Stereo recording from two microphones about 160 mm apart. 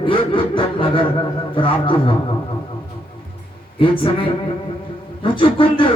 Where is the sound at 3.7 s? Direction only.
30° left (ahead or behind).